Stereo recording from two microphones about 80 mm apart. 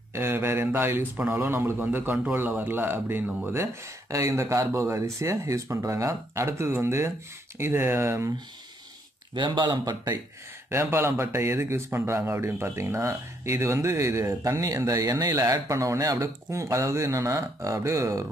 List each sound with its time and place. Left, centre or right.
0.1 s speech: right
4.1 s speech: right
9.3 s speech: right
10.7 s speech: right